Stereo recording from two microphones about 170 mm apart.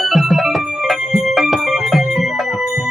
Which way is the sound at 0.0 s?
Centre (ahead or behind).